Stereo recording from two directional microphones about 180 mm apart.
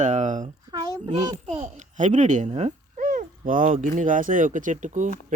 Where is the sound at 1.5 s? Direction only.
45° right (ahead or behind).